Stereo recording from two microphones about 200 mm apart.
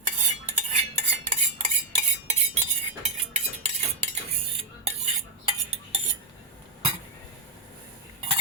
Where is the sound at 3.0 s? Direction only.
35° right (ahead or behind).